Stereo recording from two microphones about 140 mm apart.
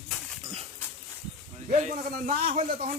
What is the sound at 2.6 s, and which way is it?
Speech, 90° right.